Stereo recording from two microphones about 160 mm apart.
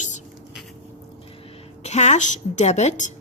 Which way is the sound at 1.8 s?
45° left (ahead or behind).